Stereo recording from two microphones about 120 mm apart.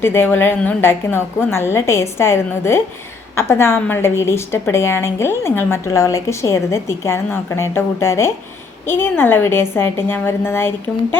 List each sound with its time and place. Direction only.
0.0 s a woman's voice: 20° left (ahead or behind)